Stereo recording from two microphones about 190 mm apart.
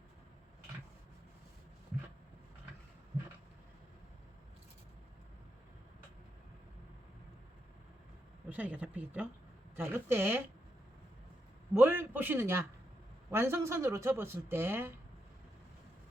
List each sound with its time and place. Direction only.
8.4 s speech: 10° right (ahead or behind)
11.7 s a man's voice: 10° right (ahead or behind)